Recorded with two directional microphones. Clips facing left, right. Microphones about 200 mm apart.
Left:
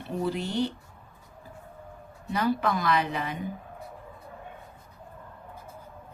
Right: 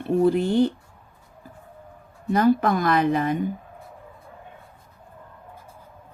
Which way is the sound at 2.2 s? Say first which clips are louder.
Right 7 dB; 50° right (ahead or behind).